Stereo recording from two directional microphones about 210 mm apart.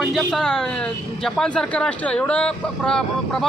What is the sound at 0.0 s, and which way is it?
A man's voice, centre (ahead or behind).